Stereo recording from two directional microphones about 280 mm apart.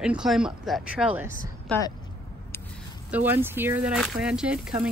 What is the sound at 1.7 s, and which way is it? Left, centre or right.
Speech, centre.